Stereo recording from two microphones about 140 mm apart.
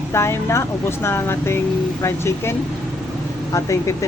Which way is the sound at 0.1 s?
20° left (ahead or behind).